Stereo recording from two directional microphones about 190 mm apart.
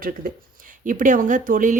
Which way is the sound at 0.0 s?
50° right (ahead or behind).